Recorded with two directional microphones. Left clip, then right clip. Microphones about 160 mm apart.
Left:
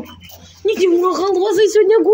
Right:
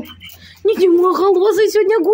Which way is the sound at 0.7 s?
35° right (ahead or behind).